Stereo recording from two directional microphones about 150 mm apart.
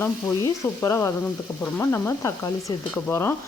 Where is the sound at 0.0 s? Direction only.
20° left (ahead or behind).